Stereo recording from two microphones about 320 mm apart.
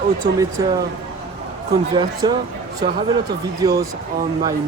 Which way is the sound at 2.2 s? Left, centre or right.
Centre.